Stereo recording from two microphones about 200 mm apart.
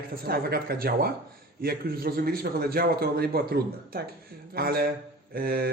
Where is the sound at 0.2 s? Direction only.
50° right (ahead or behind).